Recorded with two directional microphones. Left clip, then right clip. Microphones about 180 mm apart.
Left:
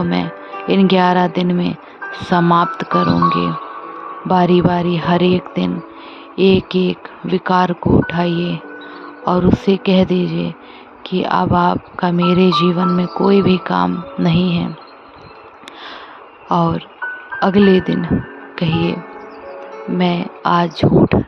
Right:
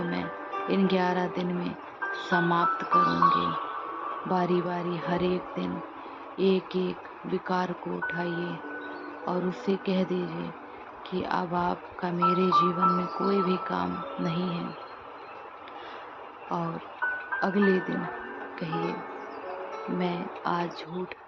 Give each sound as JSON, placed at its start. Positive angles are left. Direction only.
{"t": 0.0, "sound": "speech", "side_deg": 50}
{"t": 16.5, "sound": "speech", "side_deg": 55}
{"t": 17.0, "sound": "music", "side_deg": 45}
{"t": 17.4, "sound": "speech", "side_deg": 50}